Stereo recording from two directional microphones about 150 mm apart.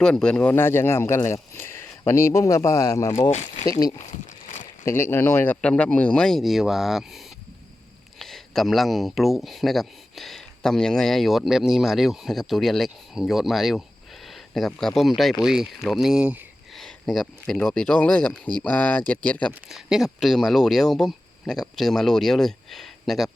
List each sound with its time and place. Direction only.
0.0 s speech: 5° left (ahead or behind); by 3.1 s 20° left (ahead or behind)
3.2 s speech: 50° left (ahead or behind)
3.7 s speech: 25° left (ahead or behind)
3.9 s a sound: 55° left (ahead or behind)
4.9 s speech: 15° left (ahead or behind)
19.6 s speech: 5° right (ahead or behind)